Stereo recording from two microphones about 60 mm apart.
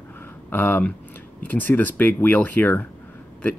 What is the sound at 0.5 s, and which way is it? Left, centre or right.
Speech, left.